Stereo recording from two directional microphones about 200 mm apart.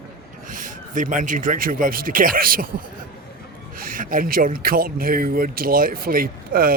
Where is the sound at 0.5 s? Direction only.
40° right (ahead or behind).